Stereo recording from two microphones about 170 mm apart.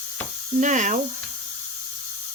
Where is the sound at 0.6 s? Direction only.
45° right (ahead or behind).